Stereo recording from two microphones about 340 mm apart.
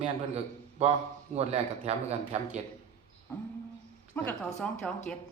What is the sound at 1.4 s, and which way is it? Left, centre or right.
Speech, centre.